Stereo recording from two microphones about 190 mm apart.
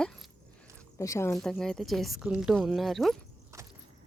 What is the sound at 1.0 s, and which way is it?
Speech, 15° left (ahead or behind).